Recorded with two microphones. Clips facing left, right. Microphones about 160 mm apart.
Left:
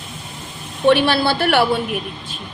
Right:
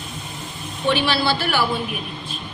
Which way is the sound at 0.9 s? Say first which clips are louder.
Left 4 dB; 55° left (ahead or behind).